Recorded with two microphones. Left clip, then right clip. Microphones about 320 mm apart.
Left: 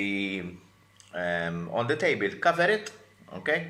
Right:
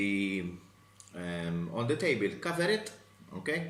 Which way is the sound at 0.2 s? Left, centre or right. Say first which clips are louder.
Left 2 dB; centre.